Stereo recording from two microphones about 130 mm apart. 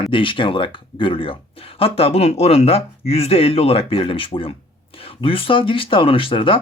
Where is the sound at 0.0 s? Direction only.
40° left (ahead or behind).